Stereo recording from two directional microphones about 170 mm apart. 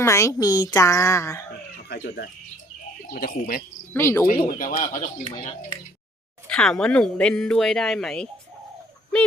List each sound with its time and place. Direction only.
0.0 s speech: 15° left (ahead or behind)
1.9 s speech: 65° left (ahead or behind)
3.9 s speech: 15° left (ahead or behind)
4.3 s speech: 55° left (ahead or behind)
5.2 s speech: 30° left (ahead or behind)
6.5 s speech: 5° left (ahead or behind)